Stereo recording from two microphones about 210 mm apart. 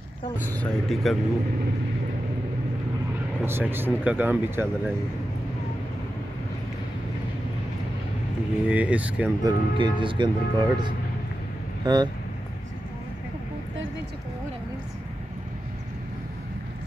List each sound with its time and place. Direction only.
0.5 s speech: 5° left (ahead or behind)
3.4 s speech: 10° right (ahead or behind)
8.6 s speech: 5° right (ahead or behind)
9.4 s speech: 20° right (ahead or behind)